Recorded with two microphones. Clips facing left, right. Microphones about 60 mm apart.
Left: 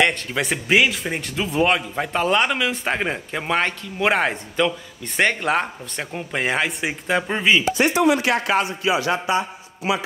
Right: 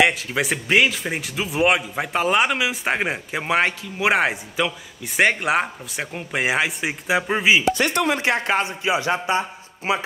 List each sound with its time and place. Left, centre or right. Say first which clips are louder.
0.0 s speech: right 1 dB; centre
7.8 s speech: left 3 dB; right
8.2 s speech: left 1 dB; right